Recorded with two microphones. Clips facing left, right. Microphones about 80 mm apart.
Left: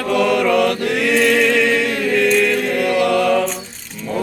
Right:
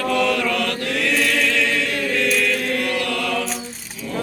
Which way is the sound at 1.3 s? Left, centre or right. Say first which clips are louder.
Left 6 dB; centre.